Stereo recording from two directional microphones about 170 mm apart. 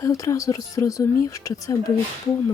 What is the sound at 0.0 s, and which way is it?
Speech, 20° left (ahead or behind).